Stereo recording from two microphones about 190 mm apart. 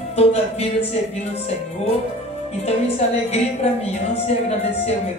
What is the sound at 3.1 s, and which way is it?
Music, 35° left (ahead or behind).